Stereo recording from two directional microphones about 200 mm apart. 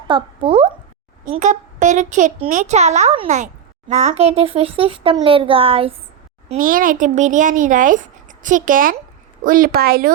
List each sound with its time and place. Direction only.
0.1 s speech: 30° right (ahead or behind)
1.2 s a child's voice: 40° right (ahead or behind)
6.6 s a child's voice: 45° right (ahead or behind)